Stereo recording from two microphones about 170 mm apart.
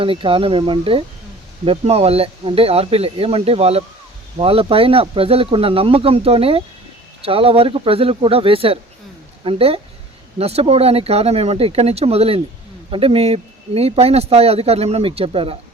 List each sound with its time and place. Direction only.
0.0 s speech: 30° right (ahead or behind)